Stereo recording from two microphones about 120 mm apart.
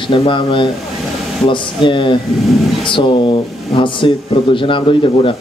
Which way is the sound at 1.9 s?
45° left (ahead or behind).